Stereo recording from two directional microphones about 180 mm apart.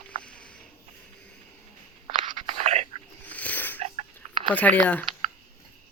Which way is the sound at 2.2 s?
30° right (ahead or behind).